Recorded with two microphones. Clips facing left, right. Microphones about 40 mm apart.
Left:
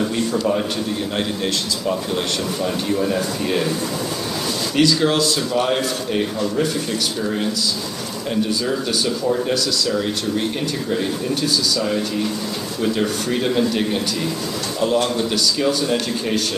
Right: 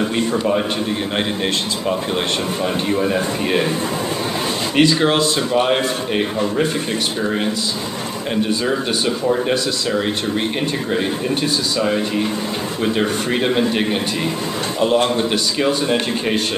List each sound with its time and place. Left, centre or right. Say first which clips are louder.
2.6 s a man's voice: right 2 dB; right
4.7 s a man's voice: right 2 dB; right
9.3 s speech: right 2 dB; right
12.8 s a man's voice: right 1 dB; right